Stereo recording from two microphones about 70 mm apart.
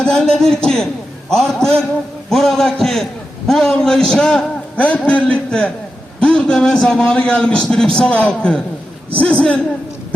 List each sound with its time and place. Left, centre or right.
0.0 s a man's voice: centre
6.1 s a sound: centre
6.6 s a man's voice: centre